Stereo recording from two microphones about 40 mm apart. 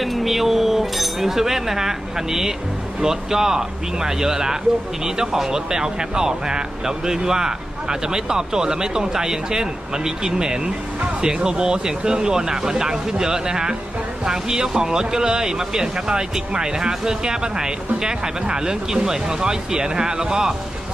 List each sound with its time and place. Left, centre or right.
0.0 s chink: centre
3.0 s speech: centre